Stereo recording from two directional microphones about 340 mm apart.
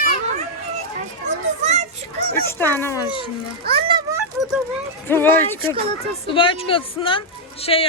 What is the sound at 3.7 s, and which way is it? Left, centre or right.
Music, centre.